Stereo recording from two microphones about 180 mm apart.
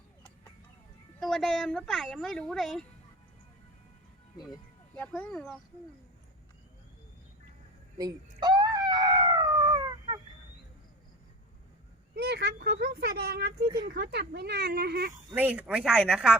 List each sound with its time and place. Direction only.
1.2 s speech: centre (ahead or behind)
4.9 s speech: 5° left (ahead or behind)
7.9 s dog: 20° right (ahead or behind)
12.1 s speech: 65° right (ahead or behind)
15.1 s speech: 15° right (ahead or behind)